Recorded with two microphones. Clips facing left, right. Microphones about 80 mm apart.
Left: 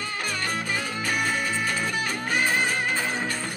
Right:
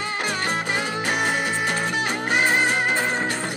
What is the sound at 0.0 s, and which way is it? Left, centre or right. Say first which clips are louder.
Music: right 4 dB; right.